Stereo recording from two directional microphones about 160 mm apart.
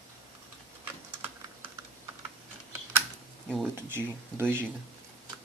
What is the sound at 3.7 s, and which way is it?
Speech, 15° right (ahead or behind).